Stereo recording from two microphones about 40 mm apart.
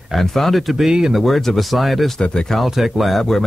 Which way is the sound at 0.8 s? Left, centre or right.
Centre.